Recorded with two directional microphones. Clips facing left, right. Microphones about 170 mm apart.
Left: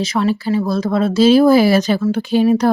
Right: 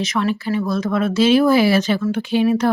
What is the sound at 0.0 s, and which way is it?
A woman's voice, 30° left (ahead or behind).